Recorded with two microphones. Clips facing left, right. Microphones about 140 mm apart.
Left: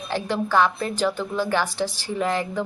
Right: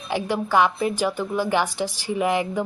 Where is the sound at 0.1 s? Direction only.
10° right (ahead or behind).